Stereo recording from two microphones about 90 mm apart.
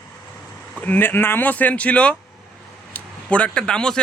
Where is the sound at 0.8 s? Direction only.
20° left (ahead or behind).